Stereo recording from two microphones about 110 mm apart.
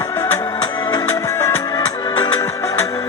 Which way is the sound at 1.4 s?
25° left (ahead or behind).